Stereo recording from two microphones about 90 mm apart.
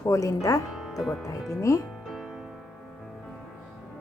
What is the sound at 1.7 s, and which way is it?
Speech, 40° left (ahead or behind).